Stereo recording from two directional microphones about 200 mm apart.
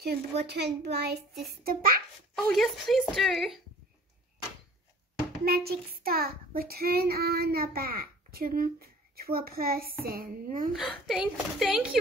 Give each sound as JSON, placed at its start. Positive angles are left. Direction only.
{"t": 0.0, "sound": "child singing", "side_deg": -55}
{"t": 2.5, "sound": "a woman's voice", "side_deg": 0}
{"t": 5.4, "sound": "child singing", "side_deg": -50}
{"t": 10.7, "sound": "a woman's voice", "side_deg": 0}